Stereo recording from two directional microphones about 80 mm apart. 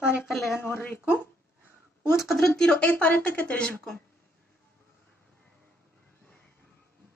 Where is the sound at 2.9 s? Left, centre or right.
Left.